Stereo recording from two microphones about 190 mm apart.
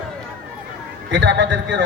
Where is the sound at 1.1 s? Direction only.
70° right (ahead or behind).